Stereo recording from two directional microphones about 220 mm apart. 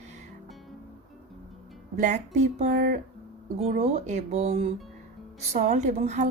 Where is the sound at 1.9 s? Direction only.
35° right (ahead or behind).